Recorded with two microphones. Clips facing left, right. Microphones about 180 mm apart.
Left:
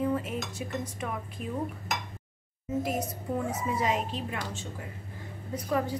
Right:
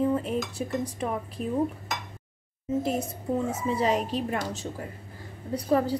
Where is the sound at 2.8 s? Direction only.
30° right (ahead or behind).